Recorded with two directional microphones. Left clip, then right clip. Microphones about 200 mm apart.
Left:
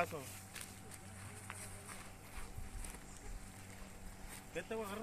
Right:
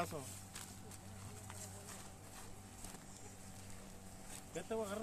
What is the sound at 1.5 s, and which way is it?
Music, 45° right (ahead or behind).